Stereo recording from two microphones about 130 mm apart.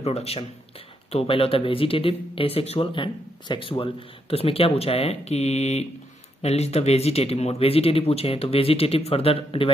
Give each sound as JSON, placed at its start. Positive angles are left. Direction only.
{"t": 0.0, "sound": "speech", "side_deg": 50}